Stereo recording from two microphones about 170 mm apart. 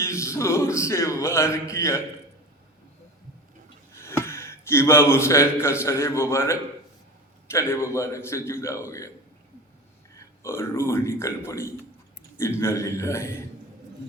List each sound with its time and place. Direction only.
0.0 s speech: 15° left (ahead or behind)
4.0 s speech: 15° left (ahead or behind)
10.2 s a man's voice: 15° left (ahead or behind)